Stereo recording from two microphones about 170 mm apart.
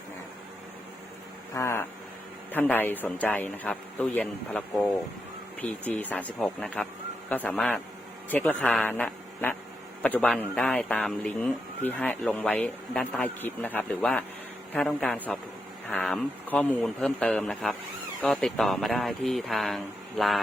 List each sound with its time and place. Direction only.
1.5 s speech: 15° left (ahead or behind)